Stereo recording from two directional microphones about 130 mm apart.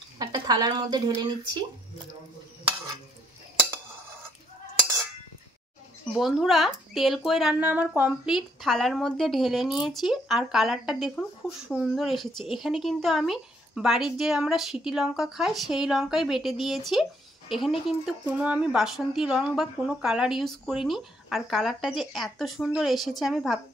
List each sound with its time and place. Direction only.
0.2 s speech: 30° right (ahead or behind)
6.1 s speech: centre (ahead or behind)
7.6 s speech: 15° right (ahead or behind)
8.3 s speech: centre (ahead or behind)